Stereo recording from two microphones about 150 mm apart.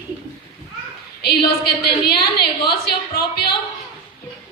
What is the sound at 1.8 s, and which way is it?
A woman's voice, 90° left.